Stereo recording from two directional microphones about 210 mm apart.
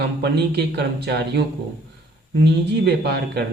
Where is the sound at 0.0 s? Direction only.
50° right (ahead or behind).